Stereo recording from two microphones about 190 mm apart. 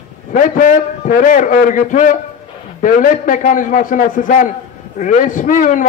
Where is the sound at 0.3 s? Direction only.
45° left (ahead or behind).